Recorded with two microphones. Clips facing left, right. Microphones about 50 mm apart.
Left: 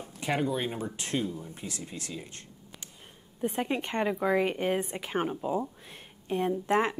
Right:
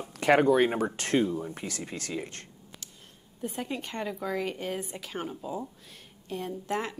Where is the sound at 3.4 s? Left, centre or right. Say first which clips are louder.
Left 4 dB; left.